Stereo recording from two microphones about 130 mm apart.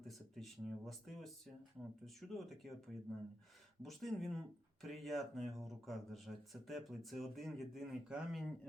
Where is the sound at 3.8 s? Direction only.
Centre (ahead or behind).